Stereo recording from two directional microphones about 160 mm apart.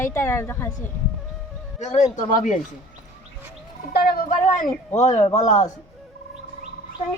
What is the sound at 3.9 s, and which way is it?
Speech, 70° left (ahead or behind).